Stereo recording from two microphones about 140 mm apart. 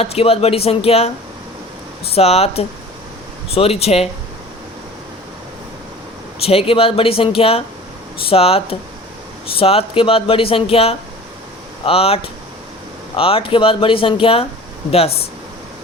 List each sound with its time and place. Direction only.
0.0 s speech: 45° left (ahead or behind)
2.1 s speech: 50° left (ahead or behind)
6.4 s speech: 45° left (ahead or behind)